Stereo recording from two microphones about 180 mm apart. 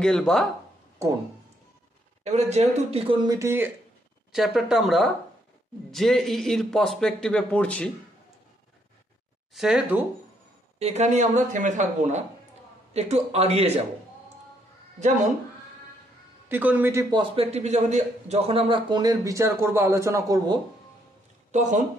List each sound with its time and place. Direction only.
0.0 s a man's voice: 5° left (ahead or behind)
2.2 s speech: 40° right (ahead or behind); by 3.7 s 15° right (ahead or behind)
4.3 s a man's voice: centre (ahead or behind)
9.5 s a man's voice: centre (ahead or behind)
10.8 s speech: 40° right (ahead or behind)
16.4 s a man's voice: 10° right (ahead or behind)
17.1 s a man's voice: 30° right (ahead or behind)
21.5 s speech: 40° right (ahead or behind)